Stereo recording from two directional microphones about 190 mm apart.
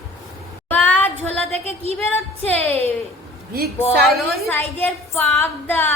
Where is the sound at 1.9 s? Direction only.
5° left (ahead or behind).